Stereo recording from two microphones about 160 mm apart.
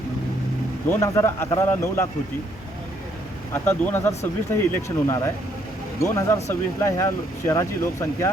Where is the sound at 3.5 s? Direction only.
15° left (ahead or behind).